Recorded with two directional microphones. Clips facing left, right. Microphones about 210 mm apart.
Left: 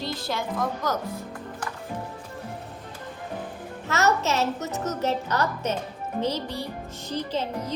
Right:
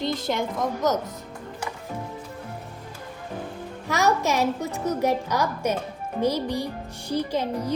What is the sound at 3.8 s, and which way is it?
A woman's voice, 10° right (ahead or behind).